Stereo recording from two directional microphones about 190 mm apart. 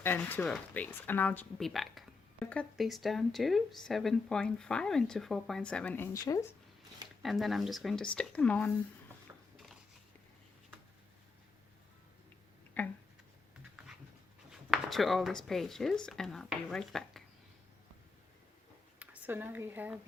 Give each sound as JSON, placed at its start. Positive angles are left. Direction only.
{"t": 0.0, "sound": "speech", "side_deg": 10}
{"t": 7.2, "sound": "speech", "side_deg": 0}
{"t": 12.8, "sound": "a sound", "side_deg": 10}
{"t": 14.5, "sound": "speech", "side_deg": 0}
{"t": 18.9, "sound": "a woman's voice", "side_deg": -10}